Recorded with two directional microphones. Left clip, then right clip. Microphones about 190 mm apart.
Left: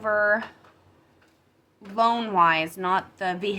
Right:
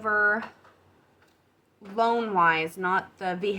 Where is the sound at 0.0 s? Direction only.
20° left (ahead or behind).